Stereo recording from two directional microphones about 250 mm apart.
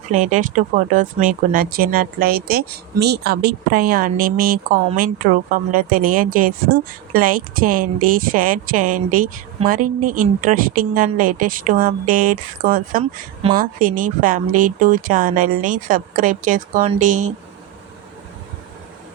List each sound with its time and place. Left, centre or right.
0.1 s speech: right